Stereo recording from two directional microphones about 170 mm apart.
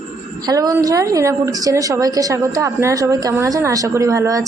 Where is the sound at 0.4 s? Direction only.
20° right (ahead or behind).